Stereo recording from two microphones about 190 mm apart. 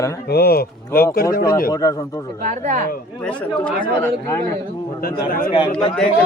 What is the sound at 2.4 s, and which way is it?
Speech, 40° right (ahead or behind).